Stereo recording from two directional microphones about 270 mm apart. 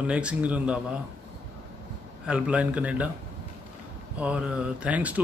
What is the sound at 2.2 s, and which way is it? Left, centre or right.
Speech, centre.